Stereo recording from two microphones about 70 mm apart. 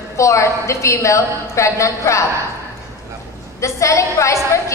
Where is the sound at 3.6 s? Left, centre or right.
Left.